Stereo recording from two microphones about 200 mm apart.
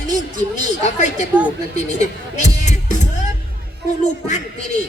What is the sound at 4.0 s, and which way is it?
Speech, 35° left (ahead or behind).